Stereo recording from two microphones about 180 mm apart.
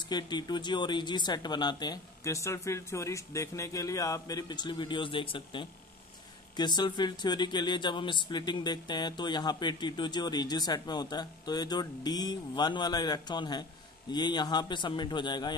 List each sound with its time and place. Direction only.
0.1 s speech: 25° left (ahead or behind)